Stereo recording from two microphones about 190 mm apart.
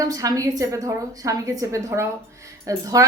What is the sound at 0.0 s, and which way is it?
A woman's voice, 15° right (ahead or behind).